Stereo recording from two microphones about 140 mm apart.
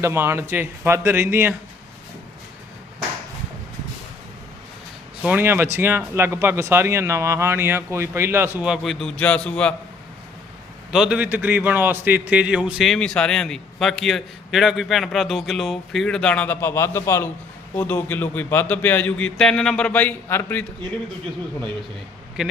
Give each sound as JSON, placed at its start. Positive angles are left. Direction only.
{"t": 0.0, "sound": "speech", "side_deg": -15}
{"t": 5.2, "sound": "speech", "side_deg": -10}
{"t": 10.9, "sound": "a man's voice", "side_deg": -5}
{"t": 22.4, "sound": "a man's voice", "side_deg": -5}